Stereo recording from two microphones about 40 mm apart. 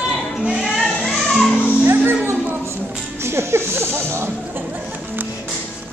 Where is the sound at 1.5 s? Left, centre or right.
Left.